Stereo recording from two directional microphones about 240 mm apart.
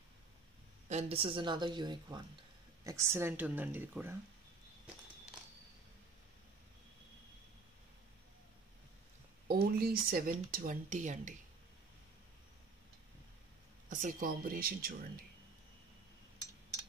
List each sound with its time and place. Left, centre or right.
0.8 s speech: right; by 4.2 s centre
9.5 s speech: right
13.8 s speech: right